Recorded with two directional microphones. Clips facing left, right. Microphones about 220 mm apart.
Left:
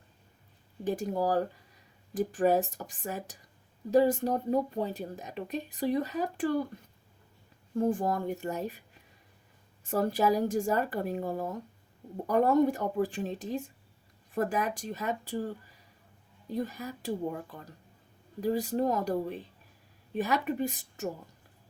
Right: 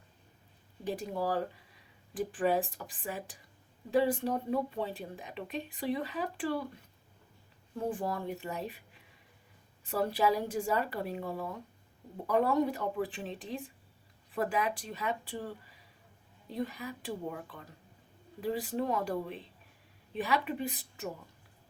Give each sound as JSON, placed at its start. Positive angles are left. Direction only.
{"t": 0.9, "sound": "a woman's voice", "side_deg": 45}
{"t": 7.8, "sound": "a woman's voice", "side_deg": 45}
{"t": 9.8, "sound": "a woman's voice", "side_deg": 45}